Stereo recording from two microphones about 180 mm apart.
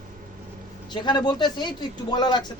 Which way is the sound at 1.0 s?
25° left (ahead or behind).